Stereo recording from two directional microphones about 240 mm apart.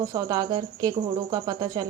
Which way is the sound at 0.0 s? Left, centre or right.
Centre.